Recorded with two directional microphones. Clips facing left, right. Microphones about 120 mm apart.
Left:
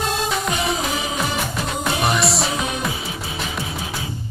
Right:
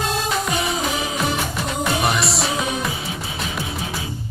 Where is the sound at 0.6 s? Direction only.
Centre (ahead or behind).